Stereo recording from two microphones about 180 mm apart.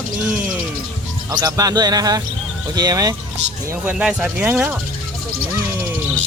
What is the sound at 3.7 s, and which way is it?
Speech, 10° right (ahead or behind).